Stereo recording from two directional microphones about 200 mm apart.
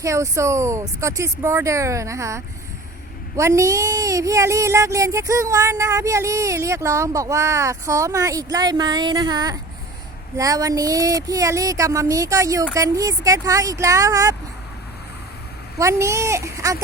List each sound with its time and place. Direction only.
0.0 s speech: 15° right (ahead or behind)
15.8 s speech: 15° right (ahead or behind)